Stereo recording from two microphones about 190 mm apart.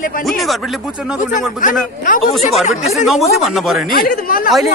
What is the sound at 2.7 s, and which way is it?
Speech, 40° left (ahead or behind).